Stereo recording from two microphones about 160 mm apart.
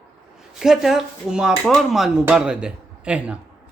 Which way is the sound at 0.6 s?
Centre (ahead or behind).